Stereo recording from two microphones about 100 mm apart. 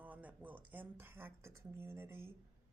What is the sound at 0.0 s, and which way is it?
Speech, 15° right (ahead or behind).